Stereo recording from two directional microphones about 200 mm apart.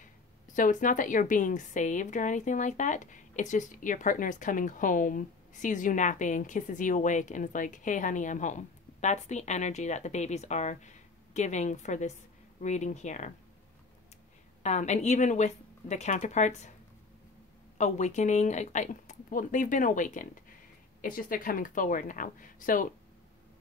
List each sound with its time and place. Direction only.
0.0 s speech: 40° left (ahead or behind)
14.6 s speech: 35° left (ahead or behind)
17.7 s speech: 35° left (ahead or behind)